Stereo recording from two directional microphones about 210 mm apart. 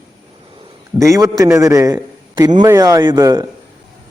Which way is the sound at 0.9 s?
15° right (ahead or behind).